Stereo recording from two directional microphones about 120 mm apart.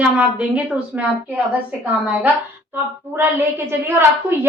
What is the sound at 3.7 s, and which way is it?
Speech, 20° right (ahead or behind).